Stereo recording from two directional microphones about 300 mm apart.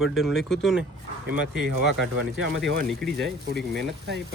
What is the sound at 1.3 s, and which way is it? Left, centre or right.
Speech, right.